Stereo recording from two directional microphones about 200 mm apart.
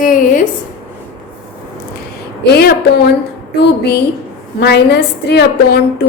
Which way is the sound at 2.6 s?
50° left (ahead or behind).